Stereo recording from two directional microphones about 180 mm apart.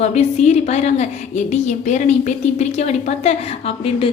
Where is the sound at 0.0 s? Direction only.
35° left (ahead or behind).